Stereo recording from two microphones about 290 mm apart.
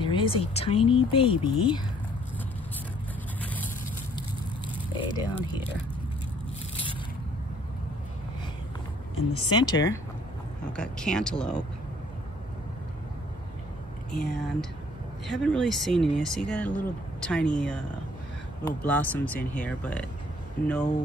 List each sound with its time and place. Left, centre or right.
0.0 s a sound: centre
0.6 s speech: left
4.8 s speech: centre
9.4 s speech: centre
10.8 s speech: centre
14.1 s speech: centre